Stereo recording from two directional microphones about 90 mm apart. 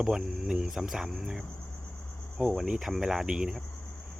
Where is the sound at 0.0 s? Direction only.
5° right (ahead or behind).